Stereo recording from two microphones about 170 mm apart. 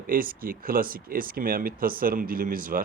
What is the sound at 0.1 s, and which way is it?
Speech, 55° right (ahead or behind).